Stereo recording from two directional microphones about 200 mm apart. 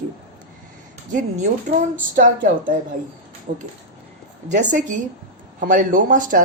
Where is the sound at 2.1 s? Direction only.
40° right (ahead or behind).